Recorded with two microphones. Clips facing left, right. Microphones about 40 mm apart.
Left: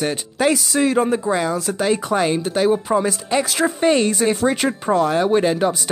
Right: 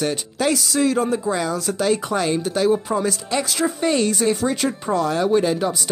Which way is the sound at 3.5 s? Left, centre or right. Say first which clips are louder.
Left 3 dB; left.